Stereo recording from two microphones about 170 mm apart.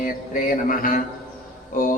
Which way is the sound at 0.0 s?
55° left (ahead or behind).